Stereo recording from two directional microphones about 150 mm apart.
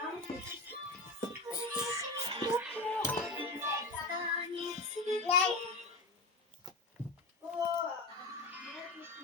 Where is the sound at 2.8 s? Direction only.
5° left (ahead or behind).